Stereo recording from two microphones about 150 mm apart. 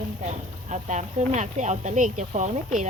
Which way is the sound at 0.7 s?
50° right (ahead or behind).